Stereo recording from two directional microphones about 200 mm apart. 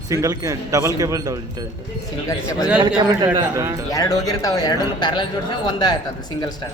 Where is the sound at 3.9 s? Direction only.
20° left (ahead or behind).